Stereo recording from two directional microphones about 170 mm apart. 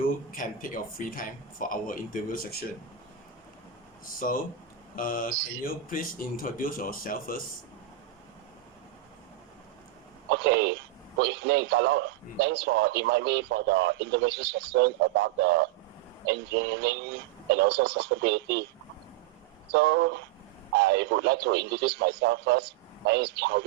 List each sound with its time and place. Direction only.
0.3 s speech: 55° left (ahead or behind)
4.0 s speech: 55° left (ahead or behind)
10.2 s a man's voice: 90° right
16.8 s a man's voice: 80° right
19.7 s a man's voice: 90° right